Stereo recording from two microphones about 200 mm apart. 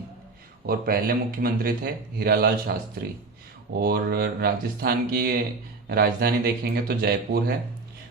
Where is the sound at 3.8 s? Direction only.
50° right (ahead or behind).